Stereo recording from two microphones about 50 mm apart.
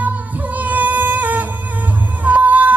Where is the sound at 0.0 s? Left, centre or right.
Right.